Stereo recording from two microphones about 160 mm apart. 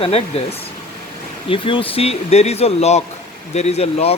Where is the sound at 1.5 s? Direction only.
35° left (ahead or behind).